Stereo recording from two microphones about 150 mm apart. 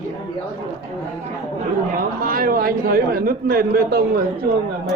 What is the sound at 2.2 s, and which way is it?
A man's voice, 75° right (ahead or behind).